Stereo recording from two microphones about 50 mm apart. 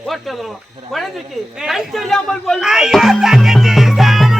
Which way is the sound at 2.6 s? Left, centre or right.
Centre.